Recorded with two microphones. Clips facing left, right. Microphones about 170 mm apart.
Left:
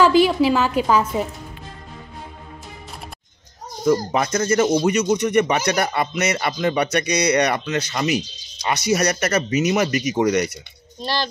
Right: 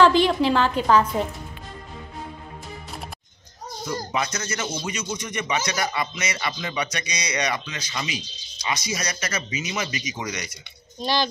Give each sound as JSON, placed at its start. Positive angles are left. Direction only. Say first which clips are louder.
{"t": 0.0, "sound": "a woman's voice", "louder": "left 2 dB", "side_deg": 10}
{"t": 4.1, "sound": "speech", "louder": "left 8 dB", "side_deg": 50}
{"t": 11.0, "sound": "speech", "louder": "right 1 dB", "side_deg": 0}